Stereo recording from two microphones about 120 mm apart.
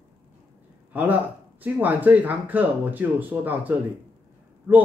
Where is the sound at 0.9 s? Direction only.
15° right (ahead or behind).